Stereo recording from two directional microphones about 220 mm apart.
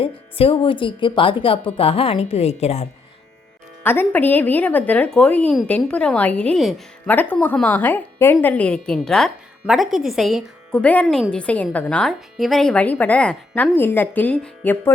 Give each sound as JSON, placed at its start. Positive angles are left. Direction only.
{"t": 0.0, "sound": "speech", "side_deg": 25}
{"t": 3.8, "sound": "a woman's voice", "side_deg": 10}